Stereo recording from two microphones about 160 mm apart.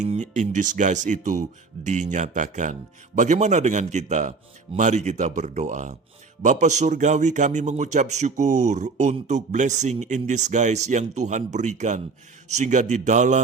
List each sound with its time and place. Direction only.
0.0 s speech: 50° right (ahead or behind)